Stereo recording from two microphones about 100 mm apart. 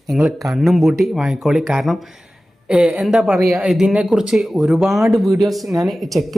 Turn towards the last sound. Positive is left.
turn(degrees=0)  # may be behind; listen again after turning